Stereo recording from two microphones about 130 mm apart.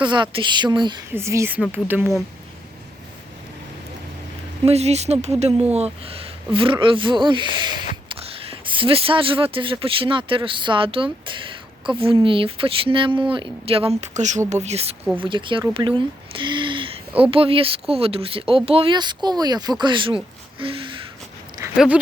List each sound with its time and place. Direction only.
0.0 s speech: 35° right (ahead or behind)
1.1 s speech: 20° right (ahead or behind)
4.6 s speech: 55° right (ahead or behind); by 7.5 s 40° right (ahead or behind)
8.1 s a sound: 45° right (ahead or behind)
9.8 s speech: 45° right (ahead or behind)
14.0 s speech: 65° right (ahead or behind)
15.2 s speech: 40° right (ahead or behind)